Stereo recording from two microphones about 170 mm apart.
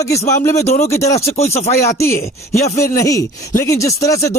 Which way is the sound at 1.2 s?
40° left (ahead or behind).